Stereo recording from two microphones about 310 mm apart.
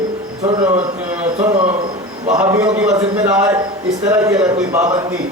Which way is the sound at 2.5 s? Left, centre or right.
Centre.